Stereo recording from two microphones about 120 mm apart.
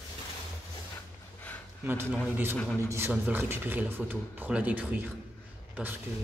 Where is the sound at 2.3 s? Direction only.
20° right (ahead or behind).